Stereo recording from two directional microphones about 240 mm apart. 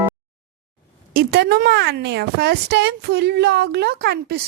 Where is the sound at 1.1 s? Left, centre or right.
Right.